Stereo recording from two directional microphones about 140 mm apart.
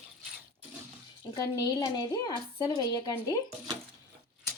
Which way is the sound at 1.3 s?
25° left (ahead or behind).